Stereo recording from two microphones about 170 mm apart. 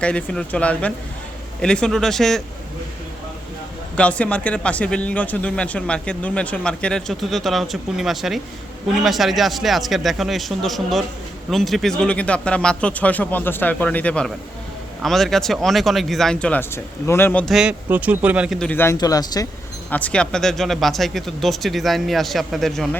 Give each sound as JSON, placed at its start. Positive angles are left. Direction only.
{"t": 0.0, "sound": "speech", "side_deg": 5}
{"t": 3.9, "sound": "speech", "side_deg": 5}
{"t": 17.4, "sound": "speech", "side_deg": -5}
{"t": 18.7, "sound": "speech", "side_deg": 15}
{"t": 19.9, "sound": "speech", "side_deg": 10}